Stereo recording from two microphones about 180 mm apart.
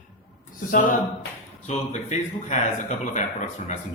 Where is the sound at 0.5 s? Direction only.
50° left (ahead or behind).